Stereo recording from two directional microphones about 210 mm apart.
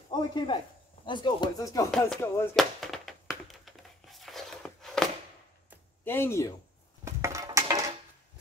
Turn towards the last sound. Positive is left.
turn(degrees=-20)  # may be behind; listen again after turning